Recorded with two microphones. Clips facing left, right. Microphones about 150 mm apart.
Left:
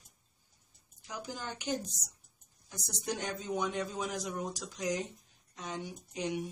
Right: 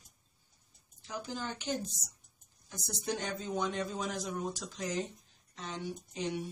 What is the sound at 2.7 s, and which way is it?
Speech, 15° left (ahead or behind).